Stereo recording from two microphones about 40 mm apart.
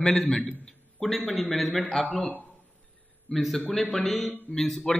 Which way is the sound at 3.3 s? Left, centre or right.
Centre.